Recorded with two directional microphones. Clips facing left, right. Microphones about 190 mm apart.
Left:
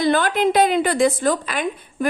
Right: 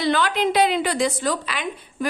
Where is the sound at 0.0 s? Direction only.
50° left (ahead or behind).